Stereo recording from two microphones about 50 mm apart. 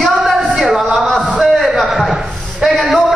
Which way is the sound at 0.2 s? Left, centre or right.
Centre.